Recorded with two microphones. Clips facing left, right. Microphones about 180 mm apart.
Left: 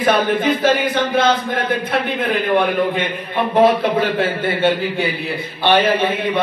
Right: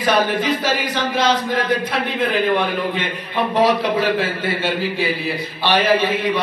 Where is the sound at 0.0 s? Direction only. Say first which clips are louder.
Left 2 dB; 55° left (ahead or behind).